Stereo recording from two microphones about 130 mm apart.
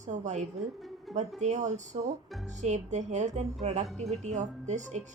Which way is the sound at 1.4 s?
65° right (ahead or behind).